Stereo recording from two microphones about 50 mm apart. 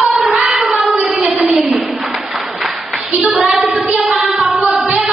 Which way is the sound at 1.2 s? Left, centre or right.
Right.